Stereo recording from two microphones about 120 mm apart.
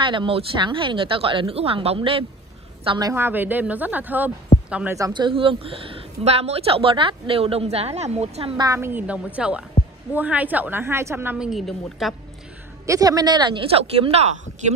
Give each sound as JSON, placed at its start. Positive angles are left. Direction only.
{"t": 0.0, "sound": "a woman's voice", "side_deg": -45}
{"t": 3.2, "sound": "a woman's voice", "side_deg": -15}
{"t": 5.1, "sound": "a woman's voice", "side_deg": -45}
{"t": 8.5, "sound": "a woman's voice", "side_deg": -25}
{"t": 11.3, "sound": "a woman's voice", "side_deg": -5}
{"t": 12.8, "sound": "speech", "side_deg": -30}